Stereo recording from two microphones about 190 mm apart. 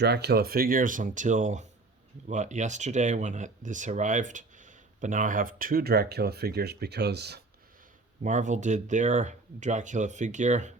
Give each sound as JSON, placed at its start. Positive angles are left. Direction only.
{"t": 0.0, "sound": "speech", "side_deg": -60}
{"t": 8.2, "sound": "speech", "side_deg": -40}